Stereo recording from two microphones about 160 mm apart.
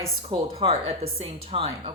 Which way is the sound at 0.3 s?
35° right (ahead or behind).